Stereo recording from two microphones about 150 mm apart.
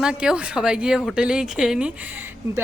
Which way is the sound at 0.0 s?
5° right (ahead or behind).